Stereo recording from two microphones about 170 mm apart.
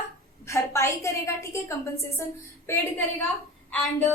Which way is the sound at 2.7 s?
15° left (ahead or behind).